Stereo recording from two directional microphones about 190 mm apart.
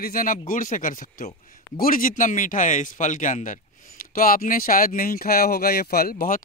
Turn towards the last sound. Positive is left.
turn(degrees=50)  # may be behind; listen again after turning